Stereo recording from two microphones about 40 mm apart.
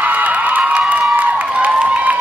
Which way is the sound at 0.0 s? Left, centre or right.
Right.